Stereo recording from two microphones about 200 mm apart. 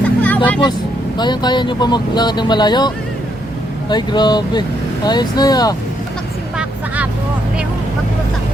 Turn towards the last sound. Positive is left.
turn(degrees=-5)  # may be behind; listen again after turning